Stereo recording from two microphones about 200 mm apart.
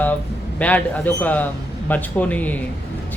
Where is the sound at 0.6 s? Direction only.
10° left (ahead or behind).